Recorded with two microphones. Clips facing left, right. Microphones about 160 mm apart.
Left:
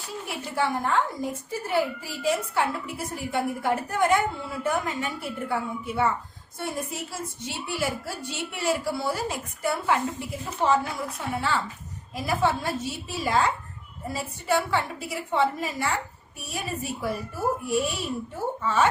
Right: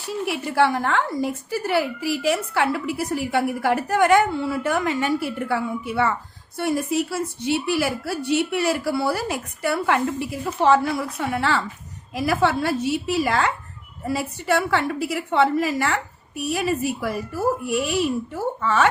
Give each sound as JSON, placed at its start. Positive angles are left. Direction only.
{"t": 0.3, "sound": "a woman's voice", "side_deg": -75}